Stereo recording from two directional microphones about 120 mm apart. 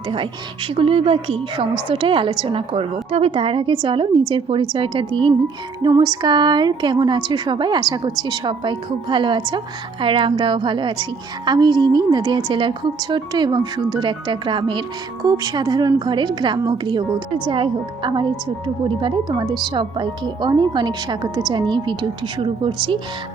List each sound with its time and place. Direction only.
0.1 s a woman's voice: 45° right (ahead or behind)